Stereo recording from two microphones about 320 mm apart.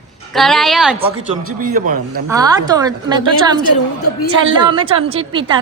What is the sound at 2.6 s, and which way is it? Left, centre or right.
Speech, centre.